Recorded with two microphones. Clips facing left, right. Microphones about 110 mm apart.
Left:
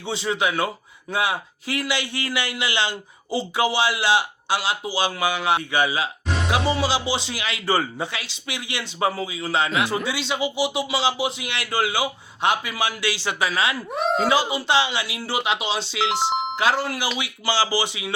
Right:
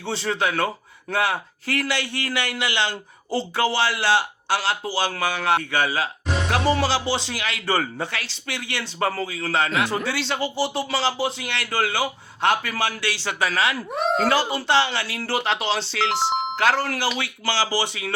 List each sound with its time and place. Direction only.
0.0 s a man's voice: 15° left (ahead or behind)
3.3 s a man's voice: 15° left (ahead or behind)
6.7 s a man's voice: 5° left (ahead or behind); by 13.7 s 20° left (ahead or behind)
13.9 s a man's voice: centre (ahead or behind)
17.2 s a man's voice: 15° left (ahead or behind)